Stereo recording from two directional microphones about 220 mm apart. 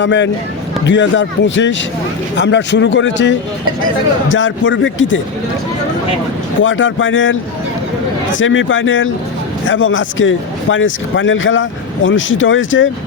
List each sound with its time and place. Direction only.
0.0 s a man's voice: 55° left (ahead or behind)
6.6 s a man's voice: 60° left (ahead or behind)